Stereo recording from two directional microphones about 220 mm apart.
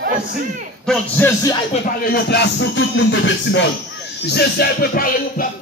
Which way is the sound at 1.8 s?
45° left (ahead or behind).